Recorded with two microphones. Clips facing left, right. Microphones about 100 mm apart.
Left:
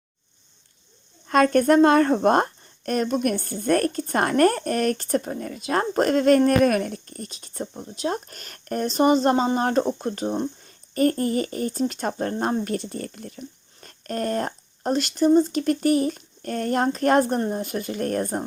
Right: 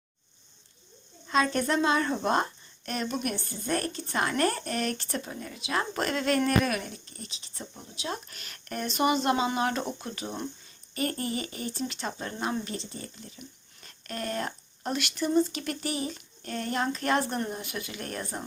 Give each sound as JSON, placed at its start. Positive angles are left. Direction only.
{"t": 1.3, "sound": "a woman's voice", "side_deg": 55}
{"t": 13.8, "sound": "a woman's voice", "side_deg": 45}